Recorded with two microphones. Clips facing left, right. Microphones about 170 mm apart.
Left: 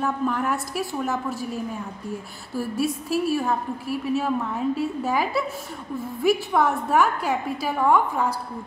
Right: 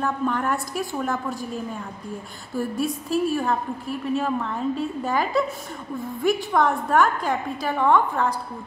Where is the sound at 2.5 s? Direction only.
5° left (ahead or behind).